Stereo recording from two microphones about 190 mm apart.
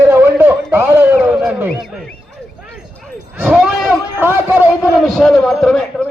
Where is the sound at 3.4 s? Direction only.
Centre (ahead or behind).